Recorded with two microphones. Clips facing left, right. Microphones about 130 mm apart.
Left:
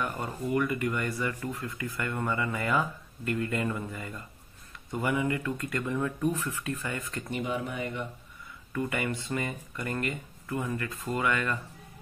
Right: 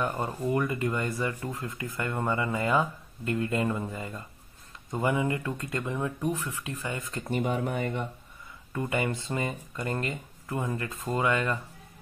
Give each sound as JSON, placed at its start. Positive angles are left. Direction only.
{"t": 0.0, "sound": "speech", "side_deg": -25}
{"t": 7.2, "sound": "speech", "side_deg": -40}
{"t": 8.7, "sound": "speech", "side_deg": -25}